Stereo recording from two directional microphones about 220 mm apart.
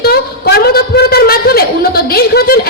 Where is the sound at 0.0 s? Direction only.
45° left (ahead or behind).